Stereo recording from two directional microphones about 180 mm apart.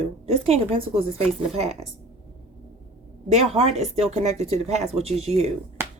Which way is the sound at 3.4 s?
35° right (ahead or behind).